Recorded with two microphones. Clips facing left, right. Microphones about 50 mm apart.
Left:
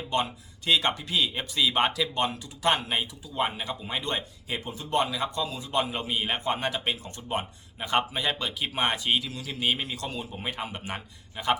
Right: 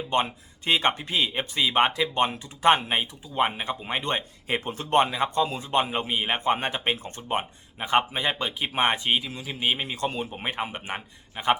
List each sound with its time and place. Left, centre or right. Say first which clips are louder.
0.1 s speech: right 2 dB; right